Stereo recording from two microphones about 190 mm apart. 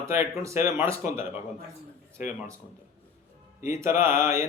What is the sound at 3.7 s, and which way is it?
Speech, 15° right (ahead or behind).